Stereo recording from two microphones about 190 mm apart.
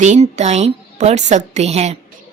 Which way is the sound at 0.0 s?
40° right (ahead or behind).